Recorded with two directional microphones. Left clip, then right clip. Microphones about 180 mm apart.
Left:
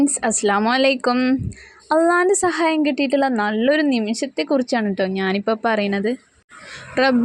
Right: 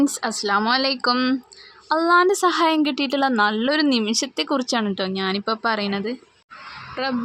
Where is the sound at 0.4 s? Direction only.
20° left (ahead or behind).